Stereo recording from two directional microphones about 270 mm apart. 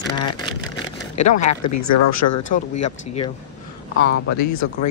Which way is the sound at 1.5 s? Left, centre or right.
Left.